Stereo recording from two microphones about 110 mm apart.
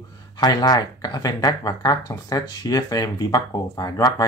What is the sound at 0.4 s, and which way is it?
Speech, 35° left (ahead or behind).